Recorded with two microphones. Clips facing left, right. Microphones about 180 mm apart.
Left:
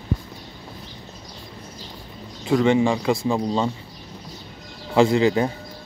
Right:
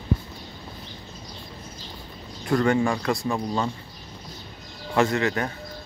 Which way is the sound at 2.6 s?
20° left (ahead or behind).